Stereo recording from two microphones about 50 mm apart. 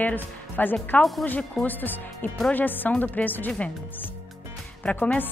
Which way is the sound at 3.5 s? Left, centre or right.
Left.